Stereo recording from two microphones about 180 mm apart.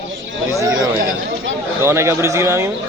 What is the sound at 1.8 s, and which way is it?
Speech, 15° right (ahead or behind).